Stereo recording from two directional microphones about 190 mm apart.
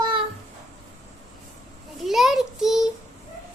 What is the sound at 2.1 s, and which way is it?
Child singing, centre (ahead or behind).